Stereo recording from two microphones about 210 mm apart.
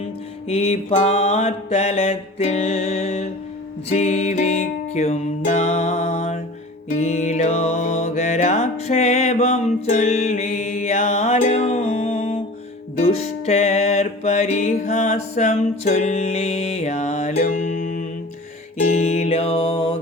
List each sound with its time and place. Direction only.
0.4 s mantra: 30° left (ahead or behind)
3.8 s music: 35° left (ahead or behind)